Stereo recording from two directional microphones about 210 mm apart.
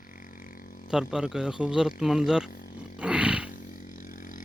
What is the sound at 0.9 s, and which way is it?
Speech, 5° right (ahead or behind).